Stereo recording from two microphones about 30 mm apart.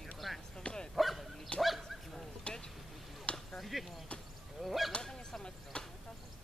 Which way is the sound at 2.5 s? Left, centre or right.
Left.